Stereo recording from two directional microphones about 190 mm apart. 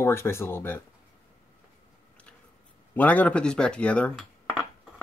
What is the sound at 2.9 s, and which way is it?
Speech, 10° left (ahead or behind).